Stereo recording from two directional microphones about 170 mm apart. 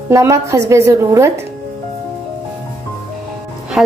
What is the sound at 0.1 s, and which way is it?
A woman's voice, 15° right (ahead or behind).